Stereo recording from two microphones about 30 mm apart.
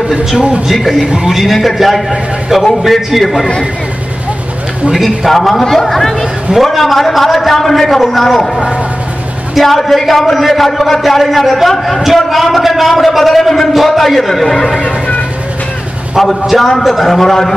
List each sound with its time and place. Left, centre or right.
0.1 s a man's voice: centre
1.0 s speech: right
1.4 s a man's voice: centre
4.9 s a man's voice: centre
5.3 s a man's voice: centre
9.6 s a man's voice: centre
14.8 s a sound: left
16.2 s a man's voice: centre